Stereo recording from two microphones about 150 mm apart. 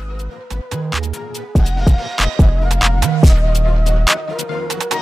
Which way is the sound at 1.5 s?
Centre (ahead or behind).